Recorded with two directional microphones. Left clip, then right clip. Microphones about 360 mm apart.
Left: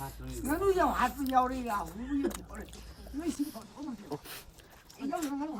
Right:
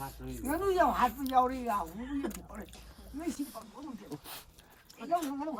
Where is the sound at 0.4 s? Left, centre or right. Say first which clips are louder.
Even; right.